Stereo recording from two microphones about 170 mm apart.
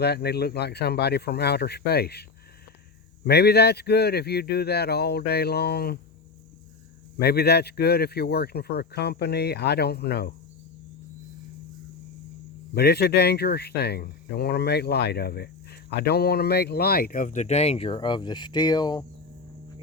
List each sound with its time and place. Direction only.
0.0 s speech: 70° left (ahead or behind)
3.2 s speech: 70° left (ahead or behind)
7.2 s speech: 70° left (ahead or behind)
12.7 s speech: 70° left (ahead or behind); by 19.0 s 25° left (ahead or behind)